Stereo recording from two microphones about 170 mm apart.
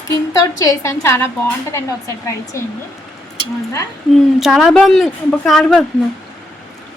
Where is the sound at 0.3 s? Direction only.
20° left (ahead or behind).